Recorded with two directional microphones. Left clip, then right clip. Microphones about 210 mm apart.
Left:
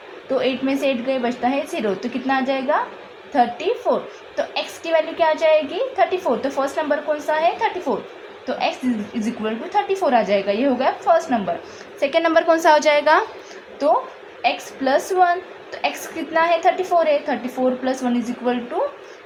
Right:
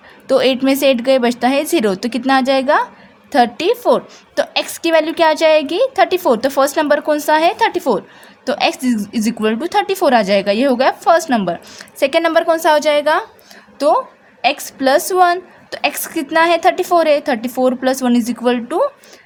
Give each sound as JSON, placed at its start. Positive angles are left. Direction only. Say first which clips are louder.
{"t": 0.3, "sound": "a woman's voice", "louder": "right 8 dB", "side_deg": -50}
{"t": 13.8, "sound": "a woman's voice", "louder": "right 4 dB", "side_deg": -50}